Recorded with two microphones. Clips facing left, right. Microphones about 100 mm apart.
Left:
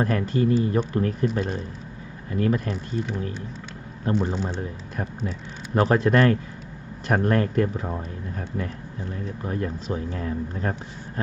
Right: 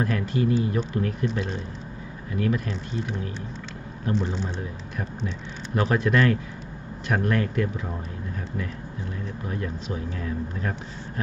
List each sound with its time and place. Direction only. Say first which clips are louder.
0.0 s speech: left 2 dB; 40° left (ahead or behind)
5.7 s speech: left 3 dB; 40° left (ahead or behind)
9.1 s speech: left 4 dB; 40° left (ahead or behind)